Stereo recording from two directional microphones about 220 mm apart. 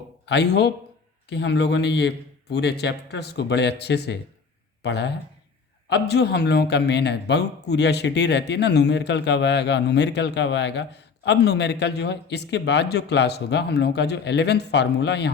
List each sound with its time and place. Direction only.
0.3 s a man's voice: 50° left (ahead or behind)